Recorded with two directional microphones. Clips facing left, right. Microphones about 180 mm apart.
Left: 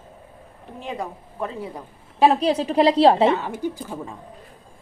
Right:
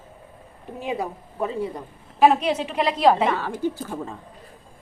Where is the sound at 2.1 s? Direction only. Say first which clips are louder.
Even; 35° left (ahead or behind).